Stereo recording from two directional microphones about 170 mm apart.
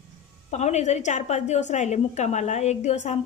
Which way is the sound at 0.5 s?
40° left (ahead or behind).